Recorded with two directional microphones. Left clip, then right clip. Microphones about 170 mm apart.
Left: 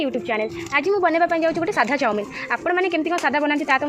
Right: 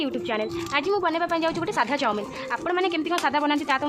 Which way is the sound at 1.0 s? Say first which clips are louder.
Left 6 dB; 25° left (ahead or behind).